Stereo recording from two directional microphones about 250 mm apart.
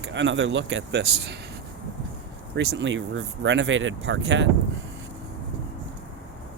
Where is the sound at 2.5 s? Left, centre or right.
Right.